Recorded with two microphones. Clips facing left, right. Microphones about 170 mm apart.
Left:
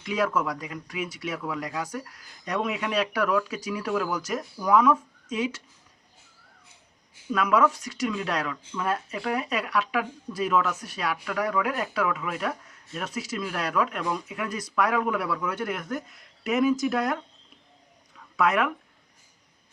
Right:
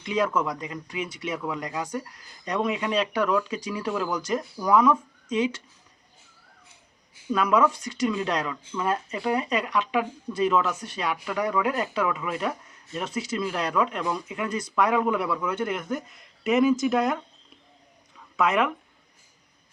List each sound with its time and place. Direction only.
0.1 s speech: centre (ahead or behind)
7.3 s speech: centre (ahead or behind)
18.3 s speech: centre (ahead or behind)